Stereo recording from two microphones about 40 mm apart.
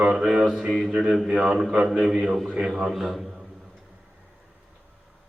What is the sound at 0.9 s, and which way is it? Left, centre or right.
Speech, right.